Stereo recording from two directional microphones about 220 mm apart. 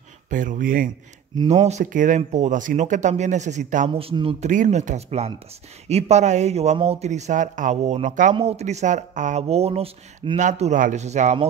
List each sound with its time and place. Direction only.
0.3 s speech: 35° right (ahead or behind)